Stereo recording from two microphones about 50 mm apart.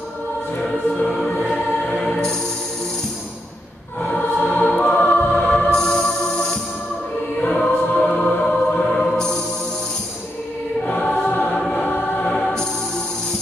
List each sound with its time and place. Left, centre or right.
0.6 s choir: left
1.3 s music: centre
4.2 s choir: left
4.6 s music: centre
4.9 s choir: left
5.7 s music: centre
7.4 s choir: left
8.2 s music: centre
10.9 s choir: left
12.3 s music: centre